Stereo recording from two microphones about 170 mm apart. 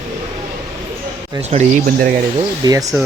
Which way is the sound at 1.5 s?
45° right (ahead or behind).